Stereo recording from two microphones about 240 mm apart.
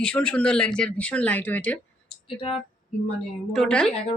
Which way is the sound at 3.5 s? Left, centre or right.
Centre.